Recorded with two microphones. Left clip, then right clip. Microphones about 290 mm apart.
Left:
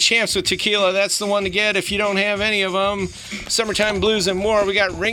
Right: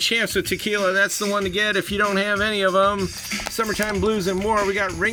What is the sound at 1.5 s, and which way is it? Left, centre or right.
Speech, left.